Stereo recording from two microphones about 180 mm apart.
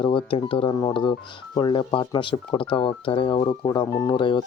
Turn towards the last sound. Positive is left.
turn(degrees=25)  # may be behind; listen again after turning